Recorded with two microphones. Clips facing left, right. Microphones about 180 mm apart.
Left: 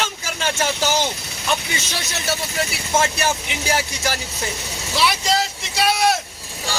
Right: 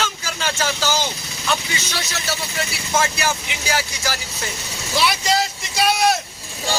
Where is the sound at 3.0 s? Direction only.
25° left (ahead or behind).